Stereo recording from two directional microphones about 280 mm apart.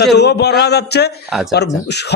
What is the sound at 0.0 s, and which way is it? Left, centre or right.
A man's voice, left.